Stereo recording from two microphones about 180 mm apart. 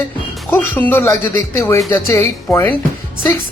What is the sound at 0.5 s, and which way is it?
A woman's voice, 10° left (ahead or behind).